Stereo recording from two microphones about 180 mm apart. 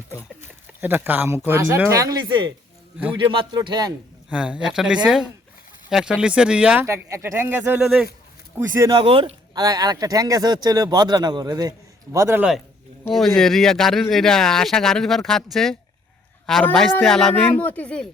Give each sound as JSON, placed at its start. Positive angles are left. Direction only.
{"t": 0.7, "sound": "speech", "side_deg": -10}
{"t": 4.3, "sound": "speech", "side_deg": -5}
{"t": 8.5, "sound": "speech", "side_deg": -20}
{"t": 13.1, "sound": "speech", "side_deg": 0}